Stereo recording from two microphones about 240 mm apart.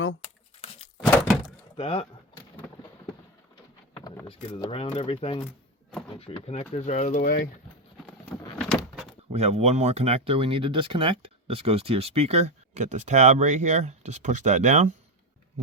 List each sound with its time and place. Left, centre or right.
1.1 s door: centre
1.7 s speech: left
3.9 s speech: centre
8.2 s door: centre
9.3 s speech: right